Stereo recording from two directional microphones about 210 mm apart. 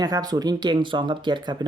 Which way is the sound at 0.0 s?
20° right (ahead or behind).